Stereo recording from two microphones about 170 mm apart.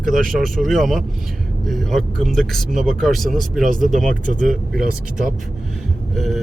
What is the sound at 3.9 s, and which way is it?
Speech, 50° right (ahead or behind).